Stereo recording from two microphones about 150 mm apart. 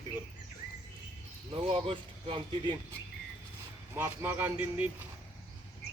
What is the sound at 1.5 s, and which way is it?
Speech, 40° right (ahead or behind).